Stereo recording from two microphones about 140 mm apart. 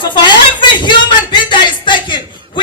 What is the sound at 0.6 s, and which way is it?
A man's voice, 35° left (ahead or behind).